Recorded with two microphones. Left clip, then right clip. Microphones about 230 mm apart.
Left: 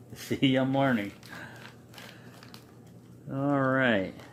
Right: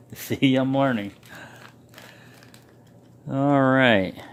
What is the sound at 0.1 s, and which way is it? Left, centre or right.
Speech, right.